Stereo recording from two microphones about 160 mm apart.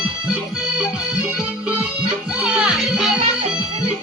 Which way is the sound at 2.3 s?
5° right (ahead or behind).